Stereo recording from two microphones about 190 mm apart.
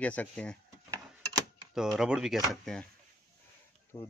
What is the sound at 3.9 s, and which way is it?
Speech, 20° left (ahead or behind).